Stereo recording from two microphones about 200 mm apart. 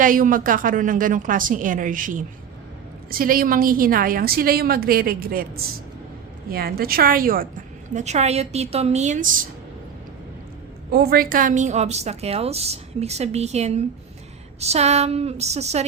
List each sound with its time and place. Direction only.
0.0 s a woman's voice: 45° right (ahead or behind)
6.5 s a woman's voice: 50° right (ahead or behind)
10.9 s a woman's voice: 50° right (ahead or behind); by 15.8 s 35° right (ahead or behind)